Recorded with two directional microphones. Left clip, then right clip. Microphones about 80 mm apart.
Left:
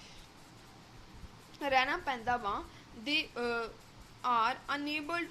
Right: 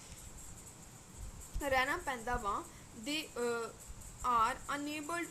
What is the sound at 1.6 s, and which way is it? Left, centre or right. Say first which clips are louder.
A woman's voice: left 3 dB; centre.